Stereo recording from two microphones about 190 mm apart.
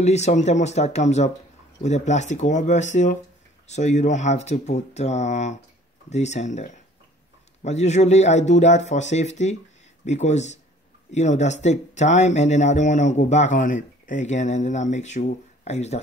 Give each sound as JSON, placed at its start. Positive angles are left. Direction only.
{"t": 0.0, "sound": "speech", "side_deg": 35}